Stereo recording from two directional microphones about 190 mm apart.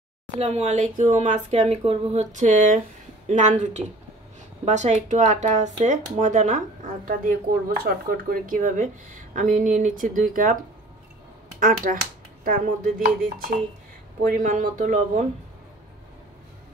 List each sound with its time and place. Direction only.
0.4 s speech: 35° right (ahead or behind)
11.6 s speech: 45° right (ahead or behind)